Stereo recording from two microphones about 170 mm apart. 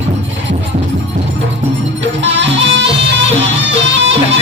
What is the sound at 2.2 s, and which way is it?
Music, 90° right.